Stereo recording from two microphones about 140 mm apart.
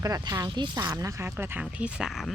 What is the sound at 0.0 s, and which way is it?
Speech, 25° right (ahead or behind).